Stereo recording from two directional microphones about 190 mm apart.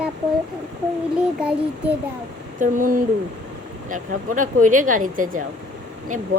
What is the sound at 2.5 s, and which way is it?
Speech, 45° right (ahead or behind).